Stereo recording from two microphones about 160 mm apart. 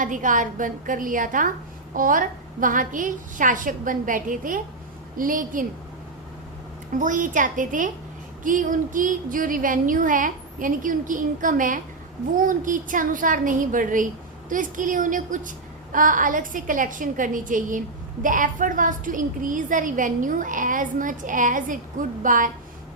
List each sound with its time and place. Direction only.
0.0 s a woman's voice: 55° right (ahead or behind)
6.9 s a woman's voice: 55° right (ahead or behind)